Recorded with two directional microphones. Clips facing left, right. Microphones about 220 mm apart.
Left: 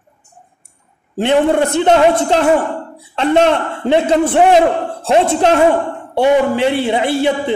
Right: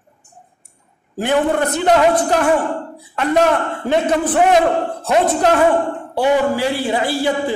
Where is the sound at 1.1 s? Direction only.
25° left (ahead or behind).